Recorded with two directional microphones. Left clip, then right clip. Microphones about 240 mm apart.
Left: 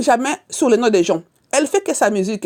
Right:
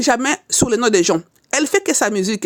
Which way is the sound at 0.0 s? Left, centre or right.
Centre.